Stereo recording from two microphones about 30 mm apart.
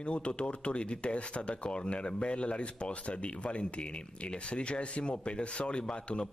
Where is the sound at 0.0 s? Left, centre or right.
Left.